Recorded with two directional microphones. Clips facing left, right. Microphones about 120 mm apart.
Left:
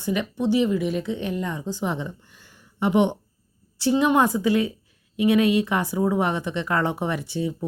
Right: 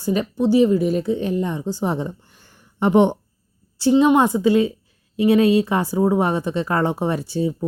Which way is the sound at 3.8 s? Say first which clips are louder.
Right 5 dB; 25° right (ahead or behind).